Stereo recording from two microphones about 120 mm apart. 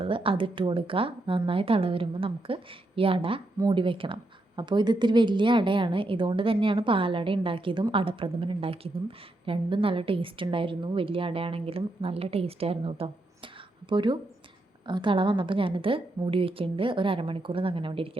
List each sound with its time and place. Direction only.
0.0 s speech: 50° right (ahead or behind)
13.9 s speech: 40° right (ahead or behind)